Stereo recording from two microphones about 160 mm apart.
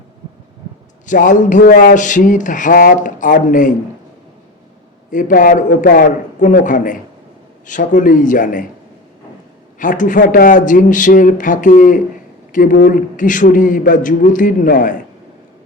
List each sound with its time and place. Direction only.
1.0 s a sound: 50° left (ahead or behind)
5.1 s speech: 60° left (ahead or behind)
9.7 s a man's voice: 55° left (ahead or behind)